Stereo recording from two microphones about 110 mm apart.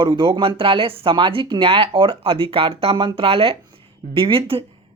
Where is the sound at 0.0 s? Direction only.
50° right (ahead or behind).